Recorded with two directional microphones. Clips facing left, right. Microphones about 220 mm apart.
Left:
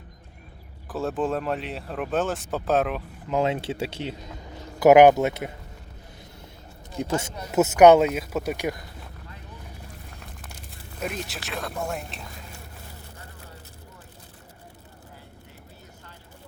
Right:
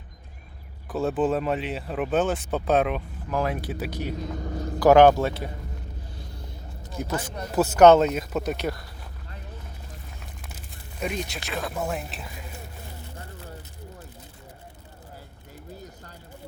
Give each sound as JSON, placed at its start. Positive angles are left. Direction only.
{"t": 0.9, "sound": "speech", "side_deg": 0}
{"t": 3.2, "sound": "speech", "side_deg": 25}
{"t": 7.0, "sound": "speech", "side_deg": 25}
{"t": 11.0, "sound": "speech", "side_deg": 0}